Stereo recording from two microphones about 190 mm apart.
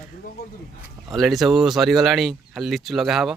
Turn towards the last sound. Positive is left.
turn(degrees=0)  # may be behind; listen again after turning